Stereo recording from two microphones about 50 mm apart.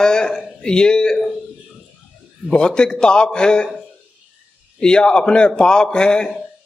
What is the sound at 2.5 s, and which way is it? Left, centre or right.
A man's voice, centre.